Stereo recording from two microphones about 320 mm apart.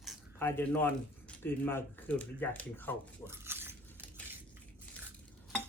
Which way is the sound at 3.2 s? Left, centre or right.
Centre.